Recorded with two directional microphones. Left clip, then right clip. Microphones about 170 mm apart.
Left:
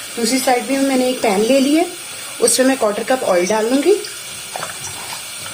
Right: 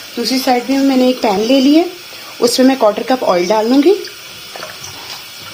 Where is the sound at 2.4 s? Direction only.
45° right (ahead or behind).